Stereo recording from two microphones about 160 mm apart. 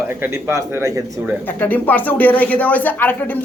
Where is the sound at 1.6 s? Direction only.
10° left (ahead or behind).